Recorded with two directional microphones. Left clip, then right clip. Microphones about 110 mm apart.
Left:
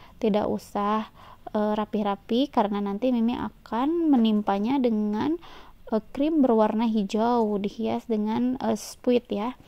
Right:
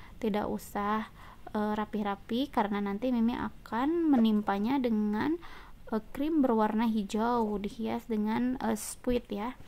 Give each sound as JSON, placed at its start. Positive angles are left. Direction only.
{"t": 0.2, "sound": "a woman's voice", "side_deg": 45}